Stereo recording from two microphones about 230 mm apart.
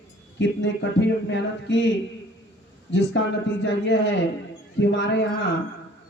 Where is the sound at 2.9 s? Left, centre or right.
Left.